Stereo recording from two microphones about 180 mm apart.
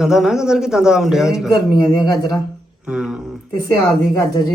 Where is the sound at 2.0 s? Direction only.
20° left (ahead or behind).